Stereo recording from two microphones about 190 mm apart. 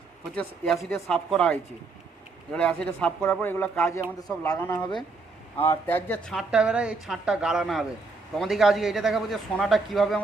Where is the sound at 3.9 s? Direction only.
15° left (ahead or behind).